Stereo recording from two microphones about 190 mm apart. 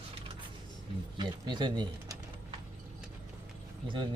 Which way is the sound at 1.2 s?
25° right (ahead or behind).